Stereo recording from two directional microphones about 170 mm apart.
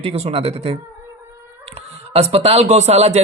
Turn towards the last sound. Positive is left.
turn(degrees=-40)  # may be behind; listen again after turning